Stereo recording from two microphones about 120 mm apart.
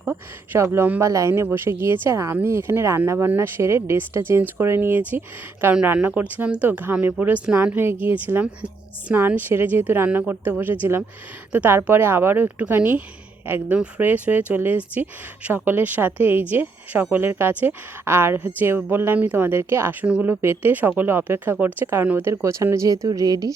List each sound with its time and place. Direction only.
0.0 s a woman's voice: 15° right (ahead or behind); by 23.6 s 30° right (ahead or behind)